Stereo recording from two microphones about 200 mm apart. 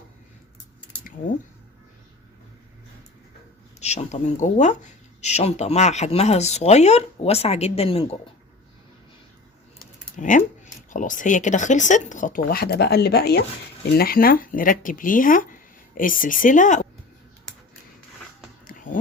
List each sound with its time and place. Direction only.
3.8 s speech: 35° left (ahead or behind)
9.7 s typing: 40° left (ahead or behind)
10.8 s speech: 40° left (ahead or behind)
18.7 s a sound: 45° left (ahead or behind)